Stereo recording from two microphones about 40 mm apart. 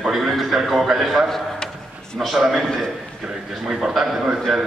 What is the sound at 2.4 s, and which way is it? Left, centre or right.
Speech, centre.